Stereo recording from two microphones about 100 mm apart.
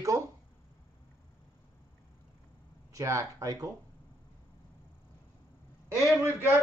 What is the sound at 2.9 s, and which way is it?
Speech, 30° right (ahead or behind).